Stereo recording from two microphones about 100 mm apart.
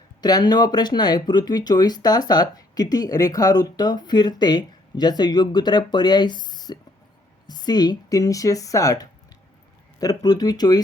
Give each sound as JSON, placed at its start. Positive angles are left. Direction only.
{"t": 0.2, "sound": "speech", "side_deg": 40}